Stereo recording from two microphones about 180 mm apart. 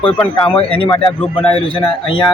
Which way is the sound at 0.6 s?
30° left (ahead or behind).